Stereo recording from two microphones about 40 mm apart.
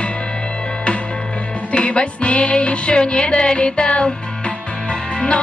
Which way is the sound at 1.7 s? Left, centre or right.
Left.